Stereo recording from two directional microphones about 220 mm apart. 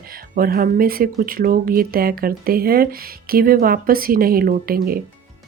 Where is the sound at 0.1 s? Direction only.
40° right (ahead or behind).